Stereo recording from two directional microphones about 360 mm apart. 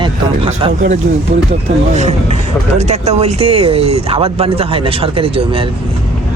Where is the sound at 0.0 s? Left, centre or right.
Centre.